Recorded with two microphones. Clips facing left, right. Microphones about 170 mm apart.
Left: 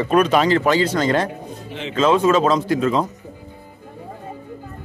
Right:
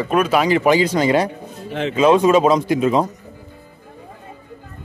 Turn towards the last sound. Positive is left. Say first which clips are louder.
# right 2 dB
turn(degrees=-15)  # may be behind; listen again after turning